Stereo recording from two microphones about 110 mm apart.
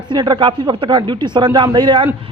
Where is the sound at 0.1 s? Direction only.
45° right (ahead or behind).